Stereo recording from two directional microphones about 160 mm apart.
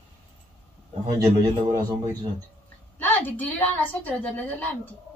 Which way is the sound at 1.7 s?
25° right (ahead or behind).